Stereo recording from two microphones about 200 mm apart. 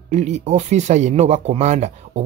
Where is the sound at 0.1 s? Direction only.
35° right (ahead or behind).